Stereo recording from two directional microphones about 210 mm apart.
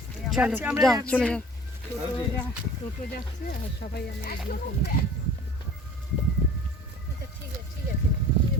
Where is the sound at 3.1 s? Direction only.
45° left (ahead or behind).